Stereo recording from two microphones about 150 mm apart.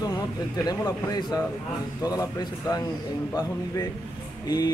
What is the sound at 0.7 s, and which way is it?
Speech, 25° left (ahead or behind).